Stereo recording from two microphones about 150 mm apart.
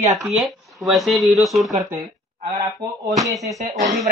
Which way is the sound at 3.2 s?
20° right (ahead or behind).